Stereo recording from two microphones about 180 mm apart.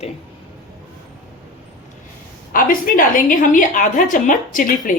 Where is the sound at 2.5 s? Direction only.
50° left (ahead or behind).